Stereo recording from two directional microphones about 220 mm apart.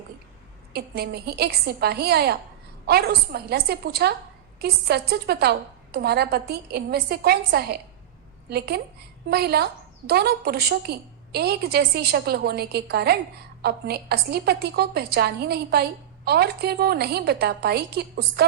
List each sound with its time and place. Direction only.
0.7 s a woman's voice: 45° right (ahead or behind)